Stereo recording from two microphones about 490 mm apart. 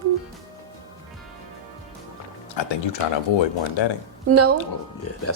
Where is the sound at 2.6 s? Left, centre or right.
Left.